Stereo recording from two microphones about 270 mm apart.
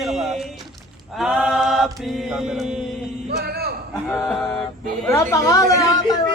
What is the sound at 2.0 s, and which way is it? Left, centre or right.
Mantra, centre.